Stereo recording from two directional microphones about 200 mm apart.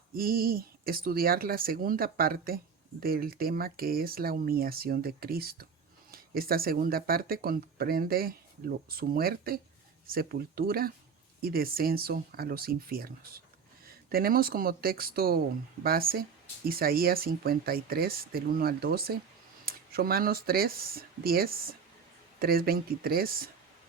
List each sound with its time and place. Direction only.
0.1 s speech: 45° right (ahead or behind)
14.1 s speech: 45° right (ahead or behind)